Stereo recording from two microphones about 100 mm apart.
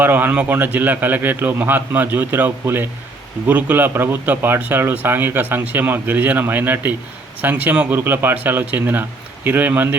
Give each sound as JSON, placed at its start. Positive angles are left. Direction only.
{"t": 0.0, "sound": "speech", "side_deg": -20}